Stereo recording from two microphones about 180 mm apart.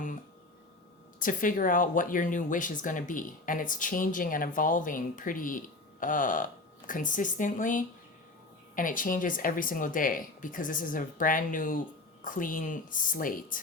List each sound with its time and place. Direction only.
1.2 s speech: 50° left (ahead or behind)